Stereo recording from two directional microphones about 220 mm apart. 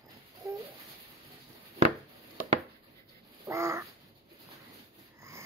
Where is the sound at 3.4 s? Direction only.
15° right (ahead or behind).